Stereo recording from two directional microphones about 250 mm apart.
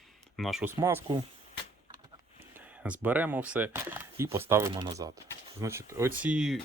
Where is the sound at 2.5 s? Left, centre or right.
Centre.